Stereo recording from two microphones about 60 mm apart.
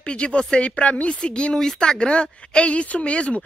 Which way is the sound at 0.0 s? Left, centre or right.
Centre.